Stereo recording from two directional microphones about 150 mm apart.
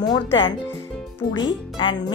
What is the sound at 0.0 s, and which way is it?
Speech, 30° left (ahead or behind).